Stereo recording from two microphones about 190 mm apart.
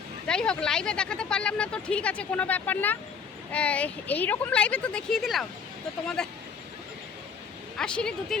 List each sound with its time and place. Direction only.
0.3 s speech: 5° left (ahead or behind)
7.8 s speech: 5° left (ahead or behind)